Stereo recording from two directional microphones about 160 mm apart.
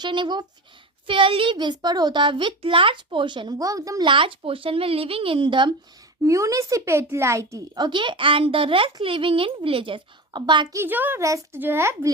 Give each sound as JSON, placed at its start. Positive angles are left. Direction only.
{"t": 0.0, "sound": "a child's voice", "side_deg": -30}
{"t": 6.2, "sound": "speech", "side_deg": -20}
{"t": 7.9, "sound": "a child's voice", "side_deg": -30}
{"t": 10.8, "sound": "speech", "side_deg": -10}